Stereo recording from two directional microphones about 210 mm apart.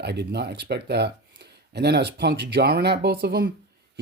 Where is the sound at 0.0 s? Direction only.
50° right (ahead or behind).